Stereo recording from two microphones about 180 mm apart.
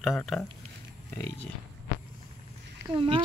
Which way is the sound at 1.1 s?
15° left (ahead or behind).